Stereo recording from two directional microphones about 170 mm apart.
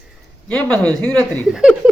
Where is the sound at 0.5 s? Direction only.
5° left (ahead or behind).